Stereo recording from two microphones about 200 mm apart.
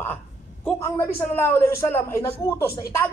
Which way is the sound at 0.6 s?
10° left (ahead or behind).